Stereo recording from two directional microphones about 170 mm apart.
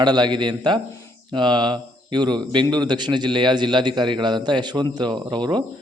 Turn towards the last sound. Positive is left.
turn(degrees=-25)  # may be behind; listen again after turning